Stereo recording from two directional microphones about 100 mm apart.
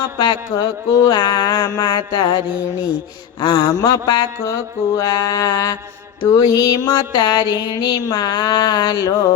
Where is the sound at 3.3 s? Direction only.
50° left (ahead or behind).